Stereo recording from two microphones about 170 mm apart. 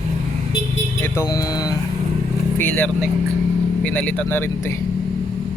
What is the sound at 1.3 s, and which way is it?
Speech, 20° left (ahead or behind).